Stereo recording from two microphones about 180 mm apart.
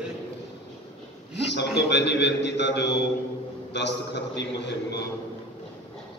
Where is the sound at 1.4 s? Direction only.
70° left (ahead or behind).